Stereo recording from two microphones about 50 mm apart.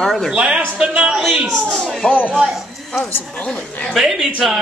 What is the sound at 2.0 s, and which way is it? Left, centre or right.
Speech, left.